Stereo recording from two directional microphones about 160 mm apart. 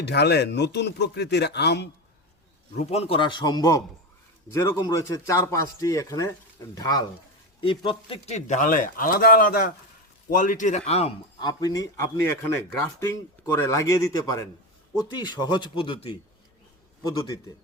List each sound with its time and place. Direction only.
0.0 s speech: 90° left
2.7 s speech: 40° left (ahead or behind); by 7.0 s 20° left (ahead or behind)
7.6 s a man's voice: 35° left (ahead or behind); by 9.7 s 65° left (ahead or behind)
10.2 s a man's voice: 55° left (ahead or behind)
11.3 s speech: 25° left (ahead or behind)
13.6 s speech: 20° left (ahead or behind)
17.2 s speech: 20° left (ahead or behind)